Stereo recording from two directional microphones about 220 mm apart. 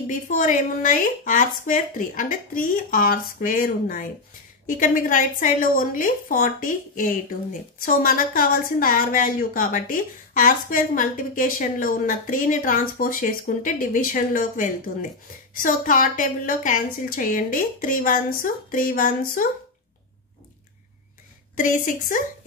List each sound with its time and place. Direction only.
0.0 s a woman's voice: 35° left (ahead or behind)
21.5 s a woman's voice: 35° left (ahead or behind)